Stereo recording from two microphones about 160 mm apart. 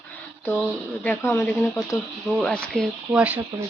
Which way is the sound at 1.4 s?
5° left (ahead or behind).